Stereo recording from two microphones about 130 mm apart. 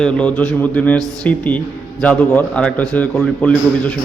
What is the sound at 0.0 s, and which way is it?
A man's voice, 10° left (ahead or behind).